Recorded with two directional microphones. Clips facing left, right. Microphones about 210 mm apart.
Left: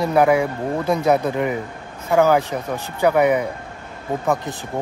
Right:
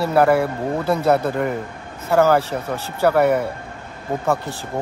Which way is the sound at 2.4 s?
15° left (ahead or behind).